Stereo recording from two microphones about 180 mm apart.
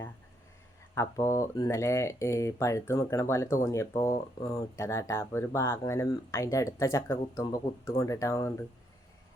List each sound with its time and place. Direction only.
0.9 s speech: 15° left (ahead or behind)